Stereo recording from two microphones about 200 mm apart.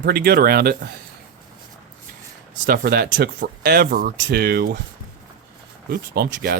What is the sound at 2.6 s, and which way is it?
Speech, 50° right (ahead or behind).